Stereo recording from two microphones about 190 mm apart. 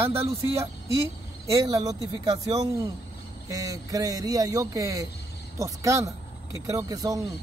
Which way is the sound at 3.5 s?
20° right (ahead or behind).